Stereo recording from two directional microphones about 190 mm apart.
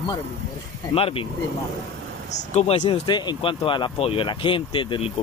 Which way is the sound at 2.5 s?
30° left (ahead or behind).